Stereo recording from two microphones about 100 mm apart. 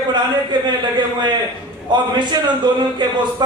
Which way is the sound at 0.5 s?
50° right (ahead or behind).